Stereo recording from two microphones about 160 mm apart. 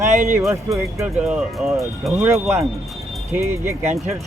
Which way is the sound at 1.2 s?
5° right (ahead or behind).